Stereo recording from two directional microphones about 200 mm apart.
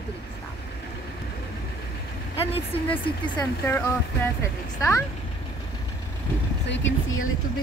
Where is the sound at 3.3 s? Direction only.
10° left (ahead or behind).